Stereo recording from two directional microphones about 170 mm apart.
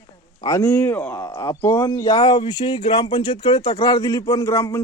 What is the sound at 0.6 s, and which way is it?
A man's voice, 10° left (ahead or behind).